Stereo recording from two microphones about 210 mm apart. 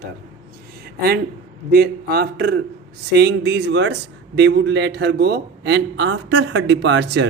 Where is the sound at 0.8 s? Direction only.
50° right (ahead or behind).